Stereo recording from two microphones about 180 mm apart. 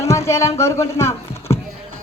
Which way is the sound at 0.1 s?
15° left (ahead or behind).